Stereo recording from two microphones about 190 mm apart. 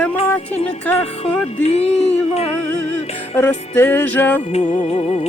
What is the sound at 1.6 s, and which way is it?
Music, 35° left (ahead or behind).